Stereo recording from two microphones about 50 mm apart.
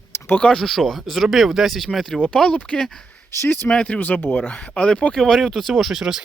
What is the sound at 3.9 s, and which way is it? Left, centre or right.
Speech, left.